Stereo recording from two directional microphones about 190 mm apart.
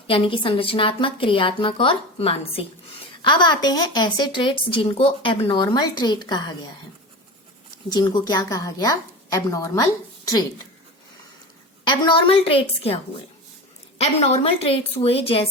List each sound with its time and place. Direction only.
0.1 s a woman's voice: 25° left (ahead or behind)
7.9 s a woman's voice: 20° left (ahead or behind)
11.9 s a woman's voice: 25° left (ahead or behind)
14.0 s a woman's voice: 35° left (ahead or behind)